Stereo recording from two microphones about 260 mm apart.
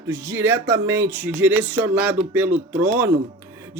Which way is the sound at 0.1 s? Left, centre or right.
Centre.